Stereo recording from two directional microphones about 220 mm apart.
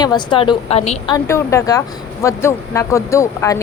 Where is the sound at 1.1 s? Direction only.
15° left (ahead or behind).